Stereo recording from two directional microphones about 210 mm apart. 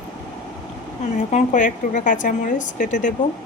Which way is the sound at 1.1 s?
35° left (ahead or behind).